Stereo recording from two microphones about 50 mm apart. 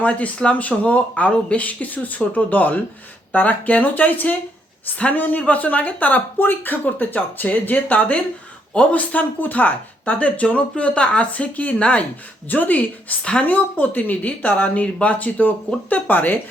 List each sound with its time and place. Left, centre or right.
0.0 s speech: left